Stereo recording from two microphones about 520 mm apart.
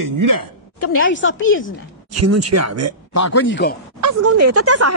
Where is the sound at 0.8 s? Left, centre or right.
Left.